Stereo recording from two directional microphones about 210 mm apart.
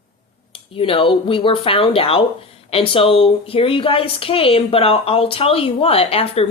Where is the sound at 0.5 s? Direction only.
25° left (ahead or behind).